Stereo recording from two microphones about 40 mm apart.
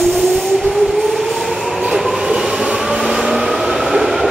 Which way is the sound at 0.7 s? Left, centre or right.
Centre.